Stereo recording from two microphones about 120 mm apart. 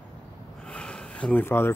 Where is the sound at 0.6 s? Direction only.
10° left (ahead or behind).